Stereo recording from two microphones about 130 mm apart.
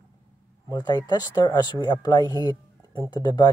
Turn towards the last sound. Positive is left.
turn(degrees=35)  # may be behind; listen again after turning